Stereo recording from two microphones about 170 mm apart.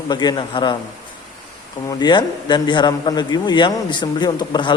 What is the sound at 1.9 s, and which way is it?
A man's voice, 25° left (ahead or behind).